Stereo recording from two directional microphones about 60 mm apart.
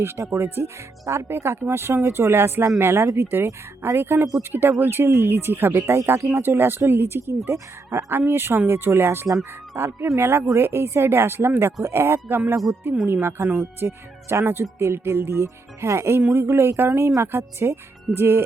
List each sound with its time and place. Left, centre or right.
0.0 s speech: right
1.0 s speech: right
6.3 s speech: right
8.1 s speech: right